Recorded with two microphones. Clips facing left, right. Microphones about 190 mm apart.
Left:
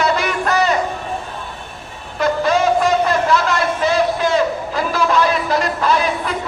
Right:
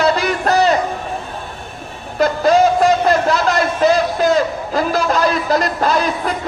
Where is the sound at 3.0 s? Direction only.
40° right (ahead or behind).